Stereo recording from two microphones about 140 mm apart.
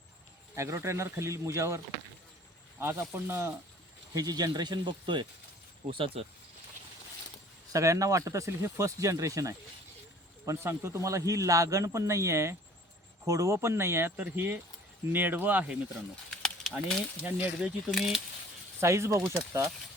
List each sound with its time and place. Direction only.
0.5 s a man's voice: 20° right (ahead or behind); by 6.2 s 40° right (ahead or behind)
7.7 s a man's voice: 25° right (ahead or behind)
16.3 s a sound: 5° left (ahead or behind)
17.2 s speech: 10° right (ahead or behind)
18.8 s a man's voice: 20° right (ahead or behind)